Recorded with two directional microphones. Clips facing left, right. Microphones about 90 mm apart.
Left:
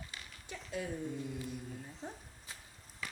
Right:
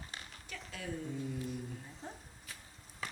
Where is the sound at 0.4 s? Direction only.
20° left (ahead or behind).